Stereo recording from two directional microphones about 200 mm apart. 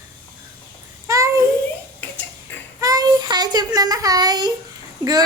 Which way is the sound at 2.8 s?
20° right (ahead or behind).